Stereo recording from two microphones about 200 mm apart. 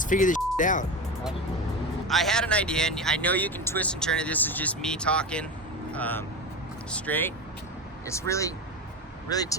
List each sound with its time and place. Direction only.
0.0 s speech: 40° left (ahead or behind)
2.0 s speech: centre (ahead or behind); by 9.6 s 20° left (ahead or behind)